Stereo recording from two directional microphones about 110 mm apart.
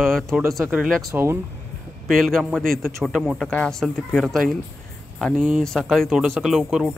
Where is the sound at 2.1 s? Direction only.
Centre (ahead or behind).